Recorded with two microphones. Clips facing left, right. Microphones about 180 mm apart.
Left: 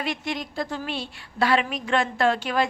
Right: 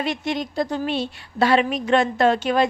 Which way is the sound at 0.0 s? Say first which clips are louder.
Right 5 dB; 20° right (ahead or behind).